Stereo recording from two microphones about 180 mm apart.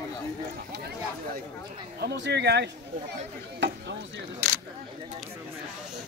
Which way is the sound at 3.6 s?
85° right.